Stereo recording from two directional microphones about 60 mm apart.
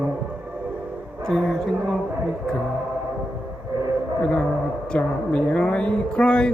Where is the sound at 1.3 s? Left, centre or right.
Centre.